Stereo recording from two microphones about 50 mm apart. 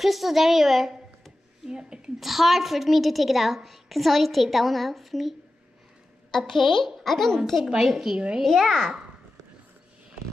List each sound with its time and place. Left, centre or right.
0.0 s a woman's voice: centre
1.7 s speech: centre
2.1 s a woman's voice: centre
6.3 s a woman's voice: centre